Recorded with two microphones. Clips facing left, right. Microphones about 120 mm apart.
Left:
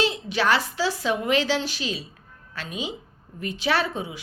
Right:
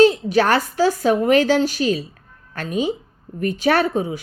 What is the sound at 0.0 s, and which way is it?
A woman's voice, 45° right (ahead or behind).